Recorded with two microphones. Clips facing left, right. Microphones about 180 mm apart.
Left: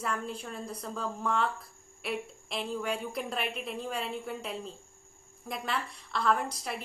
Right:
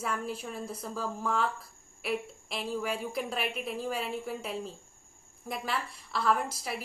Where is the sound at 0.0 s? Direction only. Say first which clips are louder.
Right 1 dB; 5° right (ahead or behind).